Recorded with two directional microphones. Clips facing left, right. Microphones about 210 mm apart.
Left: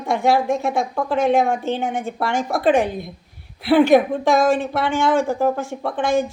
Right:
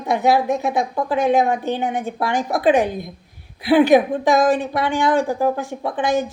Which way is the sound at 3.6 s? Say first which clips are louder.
Even; 15° right (ahead or behind).